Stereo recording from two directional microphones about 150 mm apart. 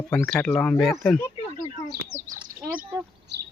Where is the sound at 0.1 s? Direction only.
5° left (ahead or behind).